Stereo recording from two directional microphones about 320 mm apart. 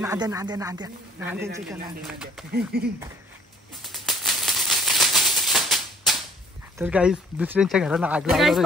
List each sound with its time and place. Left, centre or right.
0.0 s speech: centre
2.5 s speech: right
3.8 s maraca: centre
6.8 s speech: centre